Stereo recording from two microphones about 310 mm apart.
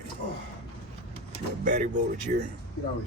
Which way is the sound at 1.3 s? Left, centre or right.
Right.